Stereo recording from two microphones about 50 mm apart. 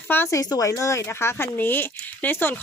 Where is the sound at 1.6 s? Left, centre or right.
Left.